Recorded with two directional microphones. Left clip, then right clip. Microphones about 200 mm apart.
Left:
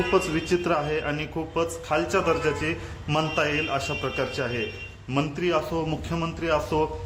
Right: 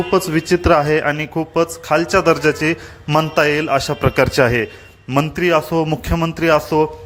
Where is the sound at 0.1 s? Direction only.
35° right (ahead or behind).